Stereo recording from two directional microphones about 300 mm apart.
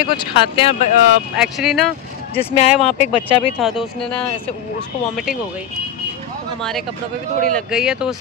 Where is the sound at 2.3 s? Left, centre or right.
Centre.